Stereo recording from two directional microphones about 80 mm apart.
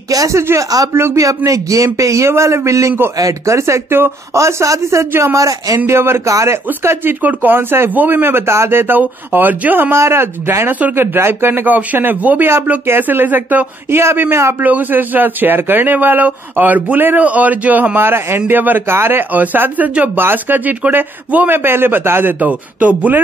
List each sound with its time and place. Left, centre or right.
0.1 s a man's voice: right
5.9 s a man's voice: right